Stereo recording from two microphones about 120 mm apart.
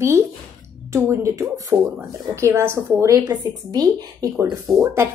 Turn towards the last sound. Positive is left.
turn(degrees=-25)  # may be behind; listen again after turning